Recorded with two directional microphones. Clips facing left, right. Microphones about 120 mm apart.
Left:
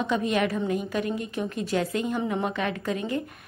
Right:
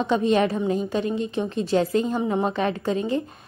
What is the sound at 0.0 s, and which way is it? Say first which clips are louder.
A woman's voice: right 5 dB; 30° right (ahead or behind).